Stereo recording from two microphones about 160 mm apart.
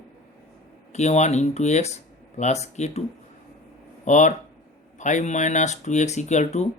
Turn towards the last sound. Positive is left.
turn(degrees=45)  # may be behind; listen again after turning